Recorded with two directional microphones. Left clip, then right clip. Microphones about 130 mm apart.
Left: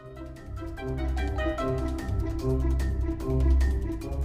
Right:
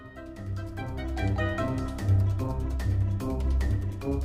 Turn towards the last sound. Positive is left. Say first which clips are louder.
# left 3 dB
turn(degrees=0)  # may be behind; listen again after turning